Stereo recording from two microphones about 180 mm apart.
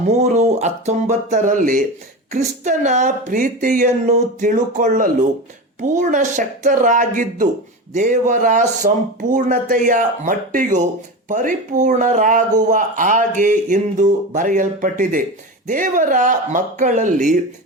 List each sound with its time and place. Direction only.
0.1 s music: 40° right (ahead or behind)
2.3 s speech: 40° right (ahead or behind)